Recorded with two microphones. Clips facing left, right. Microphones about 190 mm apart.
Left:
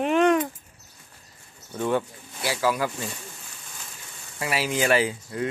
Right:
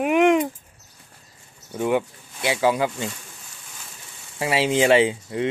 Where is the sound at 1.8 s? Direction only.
15° right (ahead or behind).